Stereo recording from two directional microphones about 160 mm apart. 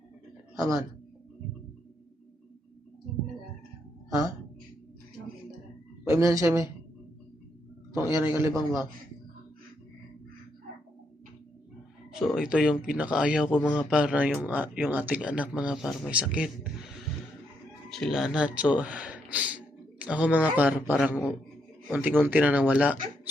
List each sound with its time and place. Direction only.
0.6 s speech: 20° right (ahead or behind)
6.1 s speech: 20° right (ahead or behind)
7.9 s a man's voice: 15° right (ahead or behind)
8.5 s a man's voice: 30° left (ahead or behind)
12.1 s a man's voice: centre (ahead or behind)
17.8 s speech: 5° left (ahead or behind)